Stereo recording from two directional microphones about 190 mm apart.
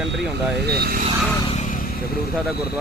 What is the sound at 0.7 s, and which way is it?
Speech, 55° right (ahead or behind).